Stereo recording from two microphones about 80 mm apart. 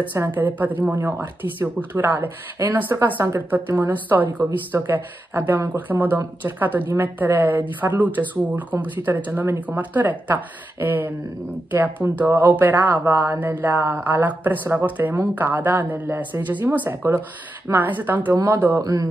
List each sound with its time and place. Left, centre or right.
0.0 s speech: right
13.0 s speech: right
13.4 s speech: right
18.8 s speech: right